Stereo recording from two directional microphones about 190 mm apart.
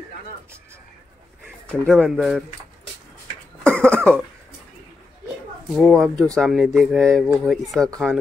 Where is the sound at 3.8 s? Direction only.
5° left (ahead or behind).